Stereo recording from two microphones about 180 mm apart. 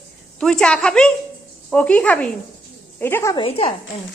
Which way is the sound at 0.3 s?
5° left (ahead or behind).